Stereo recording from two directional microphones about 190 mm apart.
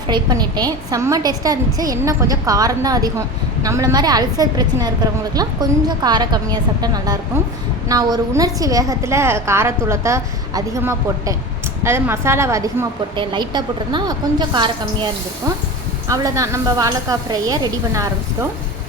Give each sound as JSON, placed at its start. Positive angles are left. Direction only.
{"t": 0.1, "sound": "a woman's voice", "side_deg": -20}